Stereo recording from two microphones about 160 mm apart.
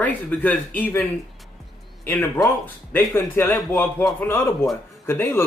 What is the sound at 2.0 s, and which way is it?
A man's voice, 10° left (ahead or behind).